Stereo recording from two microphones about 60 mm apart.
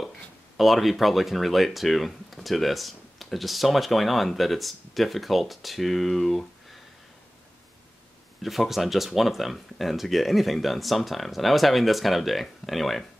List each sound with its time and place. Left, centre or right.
0.6 s speech: centre
8.4 s speech: centre